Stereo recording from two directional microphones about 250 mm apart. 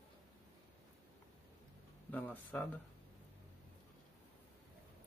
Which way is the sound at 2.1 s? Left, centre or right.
Centre.